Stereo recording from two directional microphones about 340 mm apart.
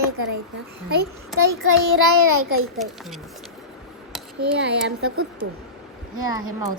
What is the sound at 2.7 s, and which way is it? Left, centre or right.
Speech, centre.